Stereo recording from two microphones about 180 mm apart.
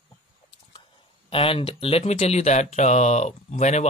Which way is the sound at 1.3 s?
30° left (ahead or behind).